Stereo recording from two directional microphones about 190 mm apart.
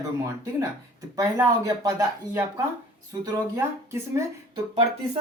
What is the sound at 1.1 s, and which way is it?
Speech, 20° right (ahead or behind).